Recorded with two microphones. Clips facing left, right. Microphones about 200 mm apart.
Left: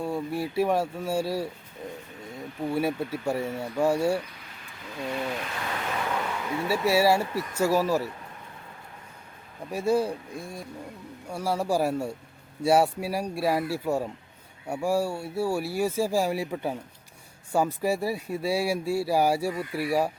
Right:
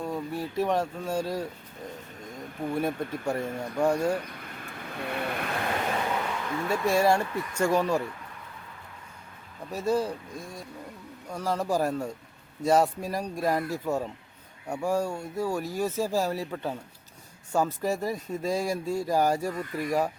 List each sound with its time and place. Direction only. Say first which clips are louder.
0.0 s speech: left 3 dB; 10° left (ahead or behind)
4.4 s a sound: right 6 dB; 55° right (ahead or behind)
6.7 s speech: left 1 dB; 5° left (ahead or behind)
9.7 s speech: left 2 dB; 10° left (ahead or behind)